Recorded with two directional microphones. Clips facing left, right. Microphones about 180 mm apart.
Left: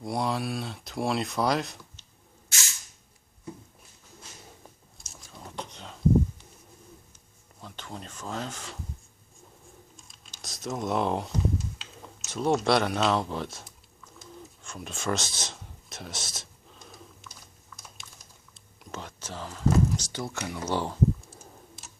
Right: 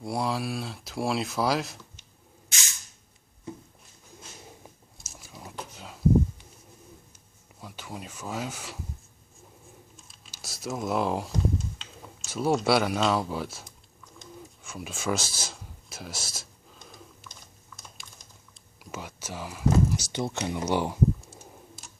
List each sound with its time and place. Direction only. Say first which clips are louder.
0.0 s speech: even; centre (ahead or behind)
4.9 s a sound: right 1 dB; 5° right (ahead or behind)
7.6 s speech: right 1 dB; 10° right (ahead or behind)
10.0 s computer keyboard: even; 5° right (ahead or behind)
11.8 s speech: even; centre (ahead or behind)
14.2 s bird: right 1 dB; 5° right (ahead or behind)
18.0 s typing: even; centre (ahead or behind)
18.8 s speech: right 1 dB; 5° right (ahead or behind)
20.1 s speech: right 4 dB; 25° right (ahead or behind)
21.8 s a sound: even; centre (ahead or behind)